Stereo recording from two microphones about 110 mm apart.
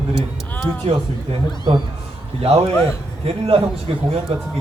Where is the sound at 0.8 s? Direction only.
70° right (ahead or behind).